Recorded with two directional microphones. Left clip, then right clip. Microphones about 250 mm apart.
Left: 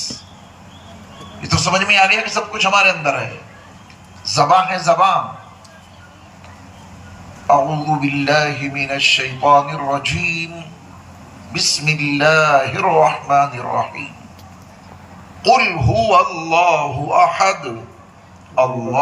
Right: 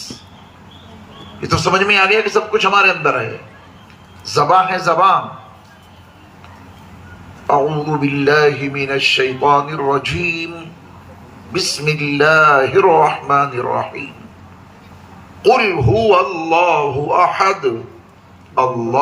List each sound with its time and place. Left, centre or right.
1.4 s mantra: centre
4.2 s a man's voice: centre
7.4 s mantra: centre
11.5 s mantra: centre
15.4 s mantra: centre